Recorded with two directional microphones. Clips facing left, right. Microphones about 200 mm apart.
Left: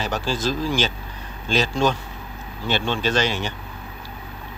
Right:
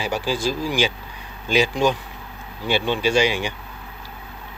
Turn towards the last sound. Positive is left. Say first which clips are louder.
# right 3 dB
turn(degrees=-10)  # may be behind; listen again after turning